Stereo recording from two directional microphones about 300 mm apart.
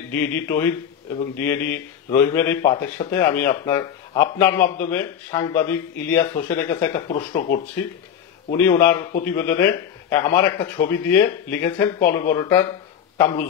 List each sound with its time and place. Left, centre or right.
0.1 s speech: centre
7.1 s speech: left
8.5 s speech: centre